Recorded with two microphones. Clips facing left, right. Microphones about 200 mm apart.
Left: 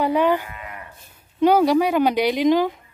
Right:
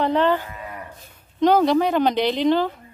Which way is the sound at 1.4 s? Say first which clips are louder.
Left 1 dB; 10° left (ahead or behind).